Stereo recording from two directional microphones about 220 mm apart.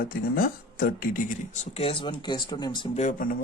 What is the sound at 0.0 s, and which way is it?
Speech, 40° left (ahead or behind).